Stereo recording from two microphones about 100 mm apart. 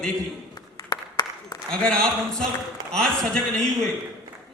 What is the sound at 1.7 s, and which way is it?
A man's voice, 10° left (ahead or behind).